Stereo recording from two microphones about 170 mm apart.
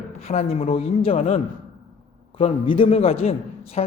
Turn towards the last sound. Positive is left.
turn(degrees=40)  # may be behind; listen again after turning